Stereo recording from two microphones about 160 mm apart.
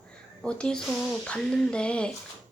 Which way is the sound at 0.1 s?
5° left (ahead or behind).